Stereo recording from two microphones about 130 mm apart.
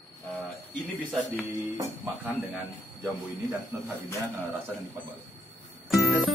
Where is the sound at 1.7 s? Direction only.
15° right (ahead or behind).